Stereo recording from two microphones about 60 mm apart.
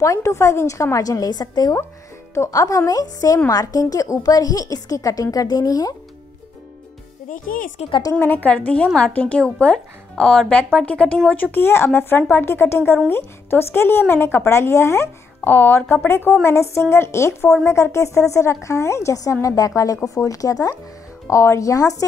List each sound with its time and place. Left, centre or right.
0.0 s a woman's voice: left
0.9 s a woman's voice: left
2.5 s a woman's voice: left
2.9 s a woman's voice: left
8.2 s a woman's voice: left
8.5 s a woman's voice: left
10.9 s a woman's voice: left
11.5 s a woman's voice: left
15.4 s a woman's voice: left
16.4 s speech: left
19.4 s a woman's voice: left
21.3 s a woman's voice: left